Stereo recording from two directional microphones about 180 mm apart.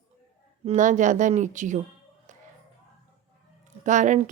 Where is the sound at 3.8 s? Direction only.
45° right (ahead or behind).